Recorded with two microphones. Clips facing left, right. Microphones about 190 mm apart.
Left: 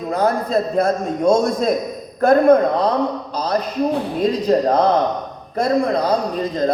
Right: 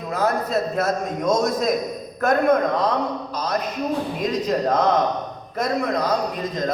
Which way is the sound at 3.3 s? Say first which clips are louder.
Left 5 dB; 30° left (ahead or behind).